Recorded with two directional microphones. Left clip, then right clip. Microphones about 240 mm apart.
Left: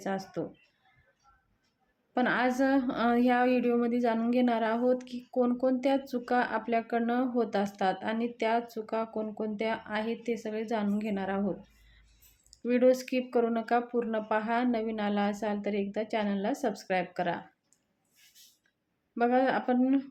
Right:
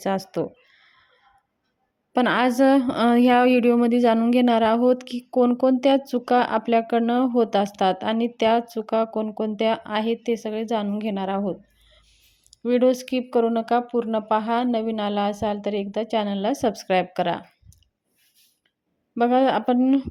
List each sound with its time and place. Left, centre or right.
0.0 s speech: right
2.1 s speech: right
19.1 s speech: right